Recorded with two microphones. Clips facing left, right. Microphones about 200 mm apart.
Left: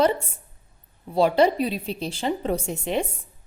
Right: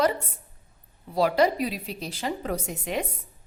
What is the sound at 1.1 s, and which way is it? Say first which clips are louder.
A woman's voice: left 3 dB; 25° left (ahead or behind).